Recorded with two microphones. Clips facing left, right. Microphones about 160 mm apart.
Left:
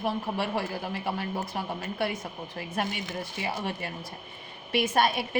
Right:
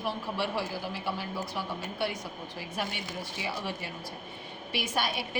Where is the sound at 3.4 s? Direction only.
60° left (ahead or behind).